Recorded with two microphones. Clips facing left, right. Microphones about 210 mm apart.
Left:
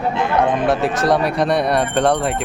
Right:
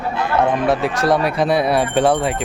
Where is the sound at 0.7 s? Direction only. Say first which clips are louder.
Even; centre (ahead or behind).